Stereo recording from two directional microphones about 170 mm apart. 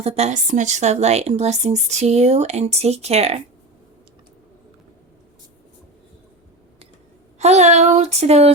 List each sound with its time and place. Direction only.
0.0 s a woman's voice: 40° right (ahead or behind)
7.3 s a woman's voice: 40° right (ahead or behind)